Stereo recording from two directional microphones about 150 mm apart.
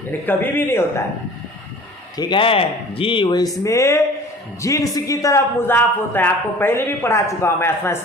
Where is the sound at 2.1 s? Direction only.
35° left (ahead or behind).